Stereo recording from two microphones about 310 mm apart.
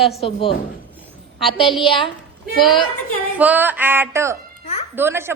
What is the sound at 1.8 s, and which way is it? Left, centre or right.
Speech, centre.